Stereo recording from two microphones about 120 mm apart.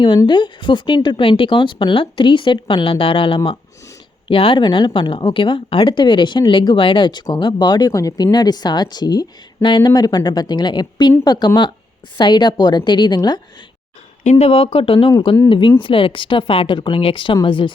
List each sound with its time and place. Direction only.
0.3 s a woman's voice: 40° left (ahead or behind)
14.3 s speech: 60° left (ahead or behind); by 17.7 s 45° left (ahead or behind)